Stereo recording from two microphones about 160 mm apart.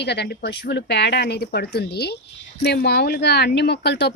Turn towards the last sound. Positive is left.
turn(degrees=90)